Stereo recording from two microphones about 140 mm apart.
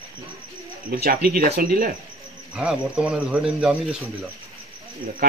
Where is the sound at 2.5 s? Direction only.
5° right (ahead or behind).